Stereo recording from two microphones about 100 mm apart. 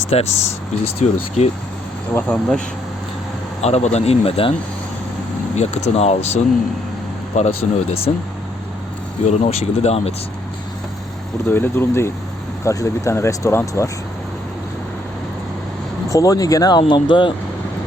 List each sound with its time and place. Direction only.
0.0 s speech: 90° left
2.3 s speech: 10° left (ahead or behind)
3.6 s speech: 90° left; by 4.5 s 65° left (ahead or behind)
5.5 s speech: 90° left
9.2 s speech: 90° left
11.4 s speech: 20° left (ahead or behind)
16.0 s speech: 35° left (ahead or behind)
16.9 s speech: 55° left (ahead or behind)